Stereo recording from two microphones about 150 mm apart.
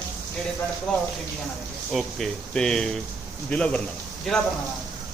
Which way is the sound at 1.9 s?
Centre (ahead or behind).